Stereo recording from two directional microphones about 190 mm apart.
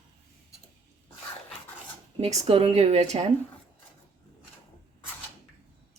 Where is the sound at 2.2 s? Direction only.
35° right (ahead or behind).